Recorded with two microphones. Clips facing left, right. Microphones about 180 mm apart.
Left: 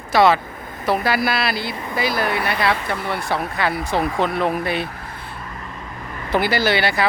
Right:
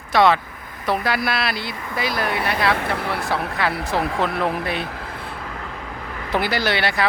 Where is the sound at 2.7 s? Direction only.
65° right (ahead or behind).